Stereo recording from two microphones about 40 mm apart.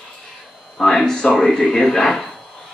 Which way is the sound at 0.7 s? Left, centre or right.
Centre.